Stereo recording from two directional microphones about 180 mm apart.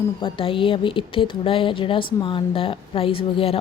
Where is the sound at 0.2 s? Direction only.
30° left (ahead or behind).